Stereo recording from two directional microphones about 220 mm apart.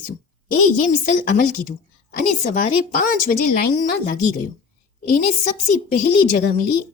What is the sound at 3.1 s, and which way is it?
Speech, 40° left (ahead or behind).